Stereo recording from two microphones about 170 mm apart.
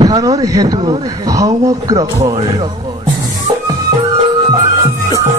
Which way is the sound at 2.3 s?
35° right (ahead or behind).